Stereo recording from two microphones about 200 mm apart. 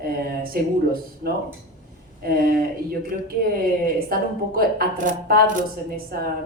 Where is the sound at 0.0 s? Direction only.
50° right (ahead or behind).